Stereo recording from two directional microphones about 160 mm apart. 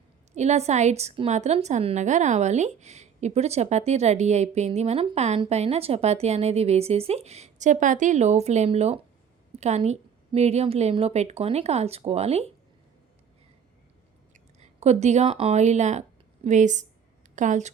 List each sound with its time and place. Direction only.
0.3 s a woman's voice: 45° right (ahead or behind)
14.6 s a woman's voice: 45° right (ahead or behind)